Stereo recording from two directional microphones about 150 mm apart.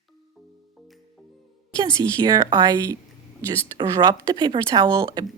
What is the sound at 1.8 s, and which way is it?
Speech, 30° right (ahead or behind).